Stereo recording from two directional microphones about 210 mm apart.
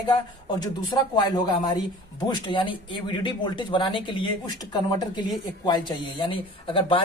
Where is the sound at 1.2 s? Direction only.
20° left (ahead or behind).